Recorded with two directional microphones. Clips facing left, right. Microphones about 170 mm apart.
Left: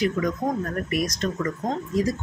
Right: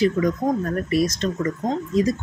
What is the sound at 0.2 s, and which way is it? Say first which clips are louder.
Speech: right 4 dB; 30° right (ahead or behind).